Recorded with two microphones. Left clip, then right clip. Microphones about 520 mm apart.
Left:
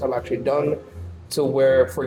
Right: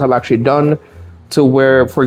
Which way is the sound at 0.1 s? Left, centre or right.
Right.